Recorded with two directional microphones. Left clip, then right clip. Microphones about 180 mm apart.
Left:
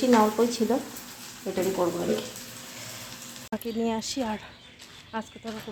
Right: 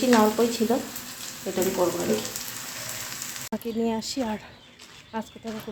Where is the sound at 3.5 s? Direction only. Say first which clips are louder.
Right 1 dB; centre (ahead or behind).